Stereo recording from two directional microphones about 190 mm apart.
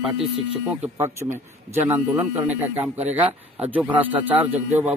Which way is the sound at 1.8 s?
10° right (ahead or behind).